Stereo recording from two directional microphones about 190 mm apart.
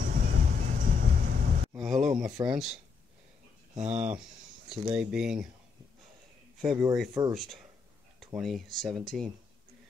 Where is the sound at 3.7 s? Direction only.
40° right (ahead or behind).